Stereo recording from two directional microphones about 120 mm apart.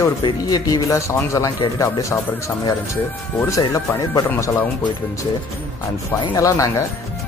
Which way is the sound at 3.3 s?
25° left (ahead or behind).